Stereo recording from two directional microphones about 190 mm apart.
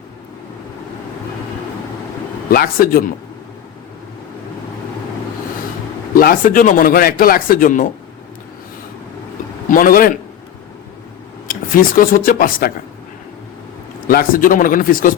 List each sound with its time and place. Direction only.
2.5 s speech: 50° left (ahead or behind)
6.1 s speech: 45° left (ahead or behind)
9.6 s speech: 45° left (ahead or behind)
11.4 s speech: 45° left (ahead or behind)
14.1 s speech: 50° left (ahead or behind)